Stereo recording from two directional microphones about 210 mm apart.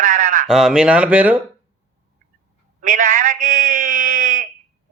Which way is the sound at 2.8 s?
40° right (ahead or behind).